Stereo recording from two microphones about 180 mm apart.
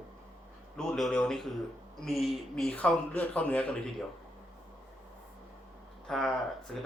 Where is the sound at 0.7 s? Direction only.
5° left (ahead or behind).